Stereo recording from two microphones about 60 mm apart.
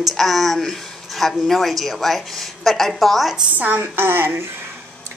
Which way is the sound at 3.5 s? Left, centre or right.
Right.